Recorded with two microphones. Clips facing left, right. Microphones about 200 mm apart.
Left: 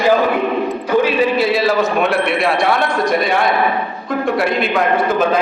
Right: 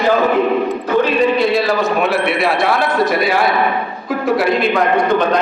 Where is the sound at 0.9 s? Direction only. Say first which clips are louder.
Even; 5° left (ahead or behind).